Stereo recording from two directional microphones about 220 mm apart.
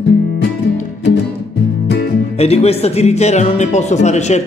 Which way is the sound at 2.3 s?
30° left (ahead or behind).